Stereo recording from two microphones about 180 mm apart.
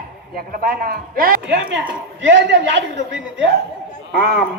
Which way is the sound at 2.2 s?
85° right.